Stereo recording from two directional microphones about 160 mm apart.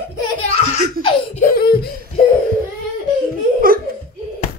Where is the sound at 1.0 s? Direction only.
30° left (ahead or behind).